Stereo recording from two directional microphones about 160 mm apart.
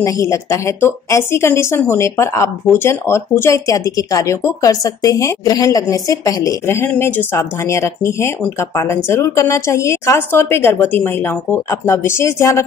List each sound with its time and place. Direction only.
0.0 s speech: 20° left (ahead or behind)